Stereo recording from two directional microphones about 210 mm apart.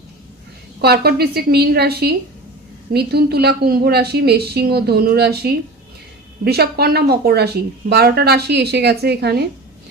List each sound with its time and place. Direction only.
0.8 s a woman's voice: 50° right (ahead or behind)